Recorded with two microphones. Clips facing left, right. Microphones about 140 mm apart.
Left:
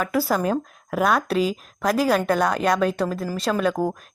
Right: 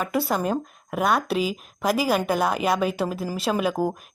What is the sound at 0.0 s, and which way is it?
A woman's voice, centre (ahead or behind).